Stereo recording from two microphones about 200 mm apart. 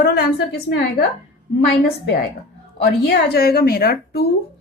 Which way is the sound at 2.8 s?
55° left (ahead or behind).